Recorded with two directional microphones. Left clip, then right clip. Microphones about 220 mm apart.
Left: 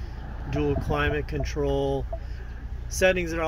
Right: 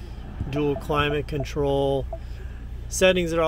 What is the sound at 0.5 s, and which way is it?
Speech, 20° right (ahead or behind).